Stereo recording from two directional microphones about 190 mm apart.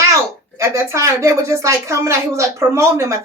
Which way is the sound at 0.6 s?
15° right (ahead or behind).